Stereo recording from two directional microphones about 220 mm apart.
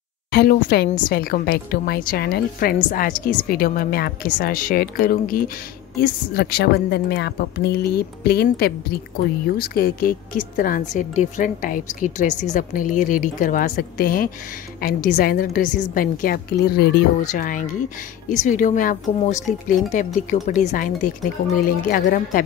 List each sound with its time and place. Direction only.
0.3 s a woman's voice: 45° left (ahead or behind)
5.9 s a woman's voice: 45° left (ahead or behind)